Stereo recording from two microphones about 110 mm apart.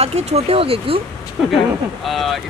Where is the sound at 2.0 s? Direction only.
Centre (ahead or behind).